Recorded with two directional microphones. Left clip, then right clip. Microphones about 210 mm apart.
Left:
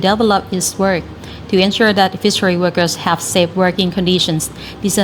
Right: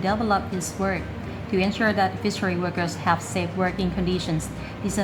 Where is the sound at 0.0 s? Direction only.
30° left (ahead or behind).